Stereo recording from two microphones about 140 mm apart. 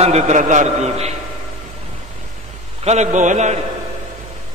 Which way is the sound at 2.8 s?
55° right (ahead or behind).